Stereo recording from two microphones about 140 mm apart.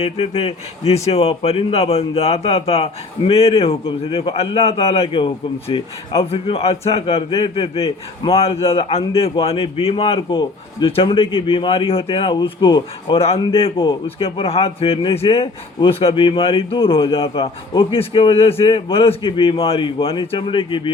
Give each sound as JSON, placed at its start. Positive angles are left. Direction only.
{"t": 0.0, "sound": "a man's voice", "side_deg": 50}